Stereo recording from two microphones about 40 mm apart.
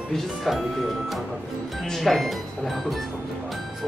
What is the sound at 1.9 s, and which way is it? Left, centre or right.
Speech, centre.